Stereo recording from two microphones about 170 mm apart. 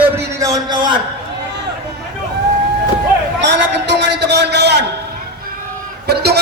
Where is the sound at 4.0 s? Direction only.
85° right.